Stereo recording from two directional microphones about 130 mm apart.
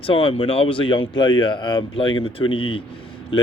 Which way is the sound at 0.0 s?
45° left (ahead or behind).